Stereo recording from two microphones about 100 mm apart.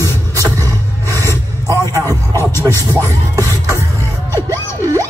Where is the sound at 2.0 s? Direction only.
25° left (ahead or behind).